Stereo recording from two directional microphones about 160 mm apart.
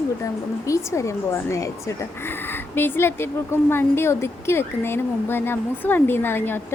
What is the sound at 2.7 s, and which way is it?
A woman's voice, 15° left (ahead or behind).